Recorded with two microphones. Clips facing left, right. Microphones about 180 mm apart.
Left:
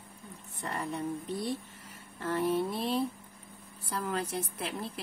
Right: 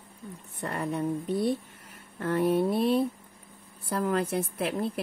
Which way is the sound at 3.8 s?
55° right (ahead or behind).